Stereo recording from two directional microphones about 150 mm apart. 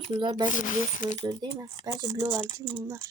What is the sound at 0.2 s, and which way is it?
Speech, 30° right (ahead or behind).